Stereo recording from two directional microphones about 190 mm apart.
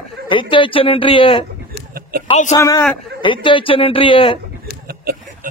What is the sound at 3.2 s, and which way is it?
A man's voice, 25° left (ahead or behind).